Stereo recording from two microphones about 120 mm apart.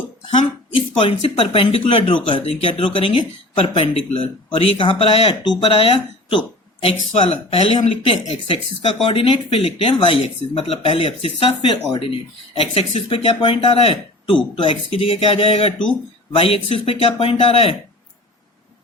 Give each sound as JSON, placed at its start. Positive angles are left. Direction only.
{"t": 0.3, "sound": "speech", "side_deg": 45}
{"t": 7.3, "sound": "speech", "side_deg": 55}
{"t": 12.7, "sound": "speech", "side_deg": 50}